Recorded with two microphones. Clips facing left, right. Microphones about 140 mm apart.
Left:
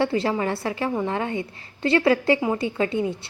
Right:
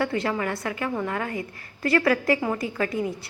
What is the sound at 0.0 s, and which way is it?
A woman's voice, 25° left (ahead or behind).